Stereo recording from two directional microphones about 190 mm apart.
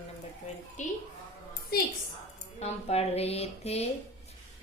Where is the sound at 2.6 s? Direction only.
35° left (ahead or behind).